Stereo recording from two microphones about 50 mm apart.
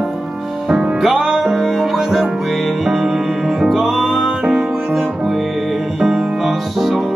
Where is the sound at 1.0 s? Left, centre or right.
Centre.